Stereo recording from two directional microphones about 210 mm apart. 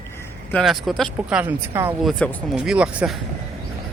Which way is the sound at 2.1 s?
Centre (ahead or behind).